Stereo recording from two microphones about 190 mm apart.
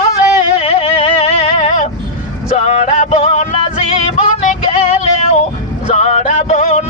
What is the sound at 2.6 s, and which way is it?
Music, 40° left (ahead or behind).